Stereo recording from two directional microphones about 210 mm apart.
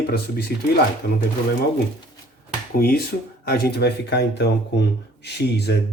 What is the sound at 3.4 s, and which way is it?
Speech, 45° left (ahead or behind).